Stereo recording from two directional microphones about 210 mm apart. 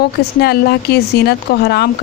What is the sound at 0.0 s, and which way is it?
A woman's voice, 50° left (ahead or behind).